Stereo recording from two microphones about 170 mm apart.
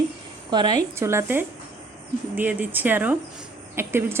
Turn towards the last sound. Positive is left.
turn(degrees=-15)  # may be behind; listen again after turning